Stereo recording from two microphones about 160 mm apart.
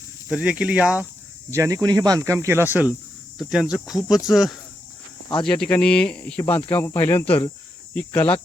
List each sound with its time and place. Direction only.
0.3 s speech: 5° right (ahead or behind)
1.5 s speech: 20° right (ahead or behind); by 8.3 s 10° left (ahead or behind)